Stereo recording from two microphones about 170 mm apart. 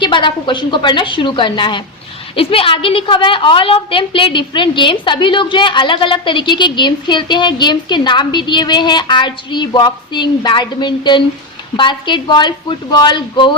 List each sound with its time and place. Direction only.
0.0 s a woman's voice: 30° left (ahead or behind)